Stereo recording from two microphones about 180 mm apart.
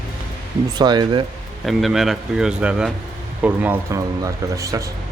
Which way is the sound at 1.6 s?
Centre (ahead or behind).